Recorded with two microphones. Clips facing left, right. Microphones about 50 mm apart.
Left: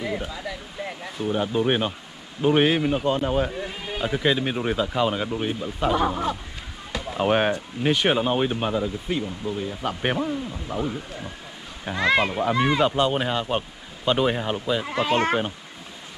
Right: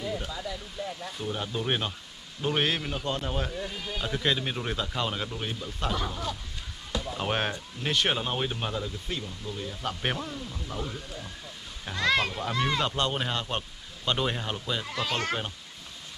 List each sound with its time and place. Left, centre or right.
1.1 s speech: centre
6.0 s speech: left
7.2 s speech: centre
14.9 s speech: left